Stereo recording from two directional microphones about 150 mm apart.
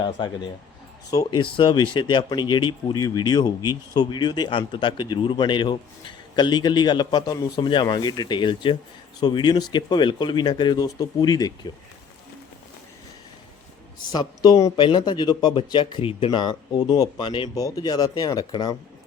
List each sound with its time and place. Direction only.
0.0 s speech: 30° left (ahead or behind)
14.1 s speech: 25° left (ahead or behind)